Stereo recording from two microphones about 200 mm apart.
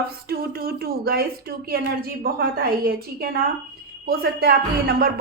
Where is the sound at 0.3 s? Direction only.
50° right (ahead or behind).